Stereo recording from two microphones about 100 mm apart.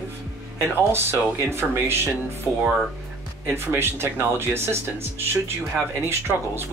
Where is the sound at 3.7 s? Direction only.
25° right (ahead or behind).